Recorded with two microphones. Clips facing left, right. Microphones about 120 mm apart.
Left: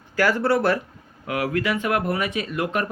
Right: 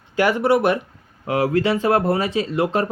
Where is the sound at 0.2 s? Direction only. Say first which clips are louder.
Right 3 dB; 20° right (ahead or behind).